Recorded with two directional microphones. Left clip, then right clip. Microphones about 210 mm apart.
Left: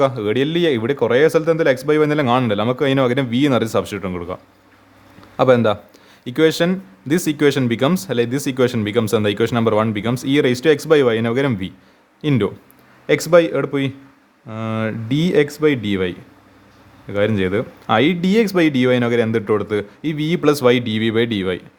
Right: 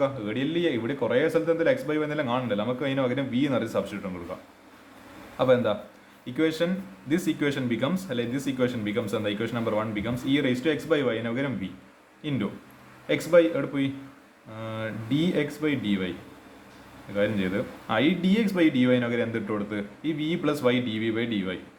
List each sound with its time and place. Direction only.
0.0 s speech: 55° left (ahead or behind)
5.4 s speech: 50° left (ahead or behind)
17.2 s speech: 50° left (ahead or behind)